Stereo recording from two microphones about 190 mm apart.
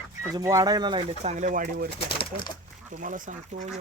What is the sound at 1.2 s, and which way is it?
Speech, 40° right (ahead or behind).